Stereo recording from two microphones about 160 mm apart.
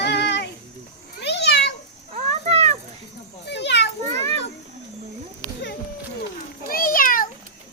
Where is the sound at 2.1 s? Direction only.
45° right (ahead or behind).